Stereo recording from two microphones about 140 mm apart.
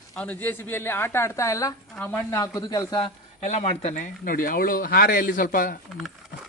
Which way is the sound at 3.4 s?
55° left (ahead or behind).